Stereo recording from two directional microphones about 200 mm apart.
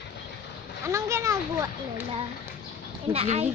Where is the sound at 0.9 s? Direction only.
15° right (ahead or behind).